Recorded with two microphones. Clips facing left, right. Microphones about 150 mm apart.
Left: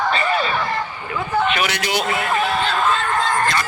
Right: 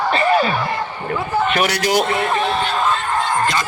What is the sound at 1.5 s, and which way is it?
Speech, 40° right (ahead or behind).